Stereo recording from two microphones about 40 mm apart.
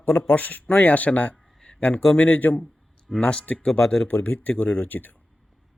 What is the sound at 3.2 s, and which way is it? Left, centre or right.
Speech, left.